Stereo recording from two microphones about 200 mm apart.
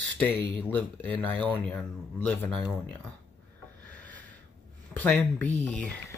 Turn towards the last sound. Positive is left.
turn(degrees=5)  # may be behind; listen again after turning